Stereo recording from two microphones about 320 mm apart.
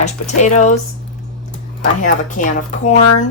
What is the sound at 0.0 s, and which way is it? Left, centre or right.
Speech, left.